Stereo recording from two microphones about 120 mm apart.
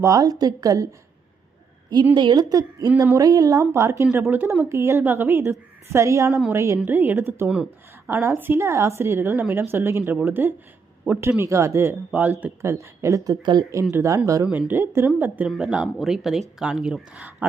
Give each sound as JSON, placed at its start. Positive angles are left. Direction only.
{"t": 0.0, "sound": "a woman's voice", "side_deg": -30}
{"t": 2.1, "sound": "a woman's voice", "side_deg": -40}
{"t": 7.4, "sound": "a woman's voice", "side_deg": -10}
{"t": 13.9, "sound": "a woman's voice", "side_deg": -25}
{"t": 14.4, "sound": "speech", "side_deg": -5}
{"t": 14.7, "sound": "speech", "side_deg": -20}
{"t": 15.4, "sound": "speech", "side_deg": -5}